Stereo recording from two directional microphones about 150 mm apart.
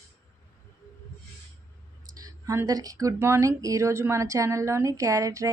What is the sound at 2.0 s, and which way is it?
Speech, 25° right (ahead or behind).